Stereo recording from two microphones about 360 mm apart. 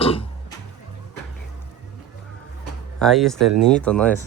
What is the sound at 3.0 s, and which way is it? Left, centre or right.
Speech, centre.